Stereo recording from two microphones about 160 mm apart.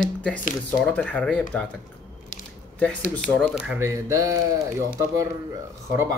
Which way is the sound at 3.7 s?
20° right (ahead or behind).